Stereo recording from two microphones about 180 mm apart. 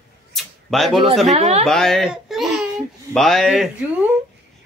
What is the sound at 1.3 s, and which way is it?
Speech, 40° right (ahead or behind).